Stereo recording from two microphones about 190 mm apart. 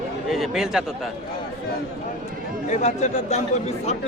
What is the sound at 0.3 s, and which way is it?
Speech, centre (ahead or behind).